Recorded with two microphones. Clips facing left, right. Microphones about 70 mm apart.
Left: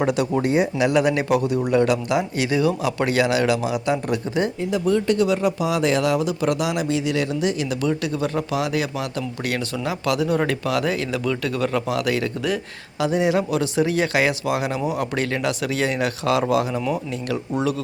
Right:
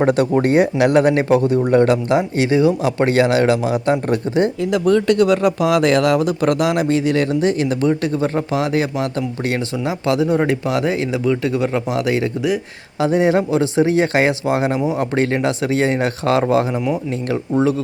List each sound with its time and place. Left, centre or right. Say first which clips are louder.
0.0 s speech: right 5 dB; right
4.7 s speech: right 4 dB; right
13.0 s speech: right 5 dB; right